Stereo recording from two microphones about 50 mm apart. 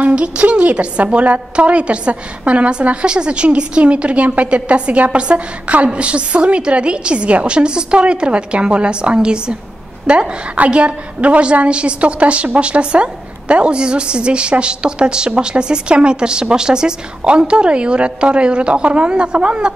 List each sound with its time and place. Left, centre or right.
0.0 s a woman's voice: right